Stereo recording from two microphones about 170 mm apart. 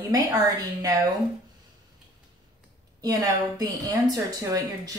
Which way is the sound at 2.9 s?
20° right (ahead or behind).